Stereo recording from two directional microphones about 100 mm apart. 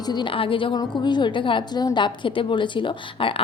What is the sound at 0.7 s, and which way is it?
A woman's voice, 50° left (ahead or behind).